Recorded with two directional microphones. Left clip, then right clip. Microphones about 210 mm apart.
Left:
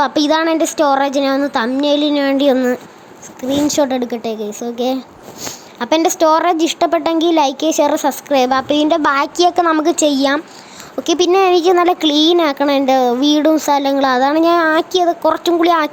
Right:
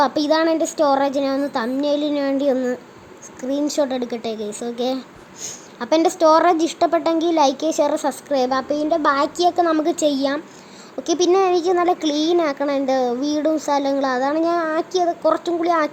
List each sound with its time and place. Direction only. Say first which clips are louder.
0.0 s speech: left 3 dB; 10° left (ahead or behind)
8.6 s speech: left 7 dB; 35° left (ahead or behind)
9.1 s speech: left 4 dB; 10° left (ahead or behind)